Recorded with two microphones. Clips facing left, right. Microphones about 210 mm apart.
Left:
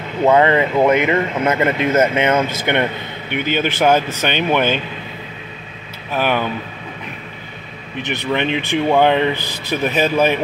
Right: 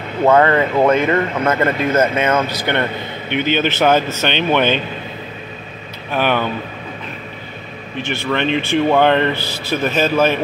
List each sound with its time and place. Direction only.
0.3 s speech: 15° left (ahead or behind)
6.1 s speech: 5° left (ahead or behind)
8.0 s speech: 20° left (ahead or behind)